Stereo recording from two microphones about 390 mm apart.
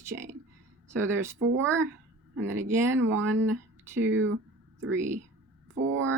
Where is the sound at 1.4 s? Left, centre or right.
Right.